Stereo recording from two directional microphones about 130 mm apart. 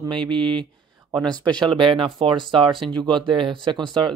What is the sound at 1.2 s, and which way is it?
Speech, 5° left (ahead or behind).